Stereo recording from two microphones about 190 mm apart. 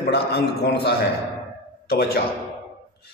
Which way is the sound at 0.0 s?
60° left (ahead or behind).